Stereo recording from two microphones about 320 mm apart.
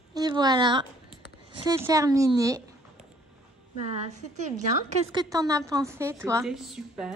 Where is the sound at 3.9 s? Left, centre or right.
Right.